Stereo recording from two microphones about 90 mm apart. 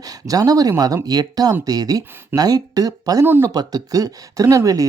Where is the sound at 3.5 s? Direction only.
45° right (ahead or behind).